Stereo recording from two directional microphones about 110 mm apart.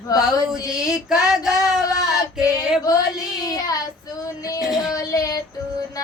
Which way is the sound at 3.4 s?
35° left (ahead or behind).